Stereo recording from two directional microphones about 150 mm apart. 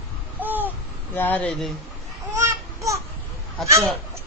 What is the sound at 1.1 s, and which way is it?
Speech, 10° left (ahead or behind).